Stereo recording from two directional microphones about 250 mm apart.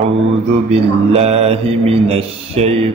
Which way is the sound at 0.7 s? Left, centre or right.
Right.